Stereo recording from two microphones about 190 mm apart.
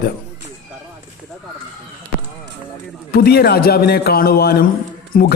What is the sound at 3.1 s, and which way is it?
A man's voice, 55° left (ahead or behind).